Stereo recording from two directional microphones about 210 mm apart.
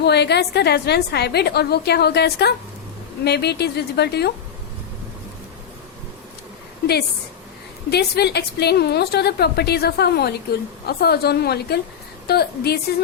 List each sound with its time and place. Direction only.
0.0 s a woman's voice: 50° left (ahead or behind)
7.9 s a woman's voice: 50° left (ahead or behind)